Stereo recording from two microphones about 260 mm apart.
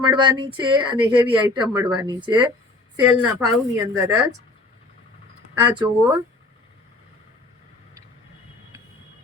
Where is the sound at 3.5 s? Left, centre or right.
Centre.